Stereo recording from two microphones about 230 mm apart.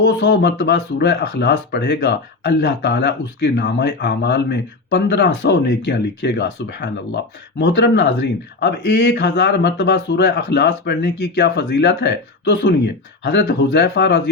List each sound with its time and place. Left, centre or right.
0.0 s speech: left